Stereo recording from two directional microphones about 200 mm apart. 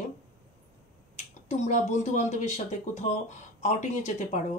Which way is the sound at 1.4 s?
35° left (ahead or behind).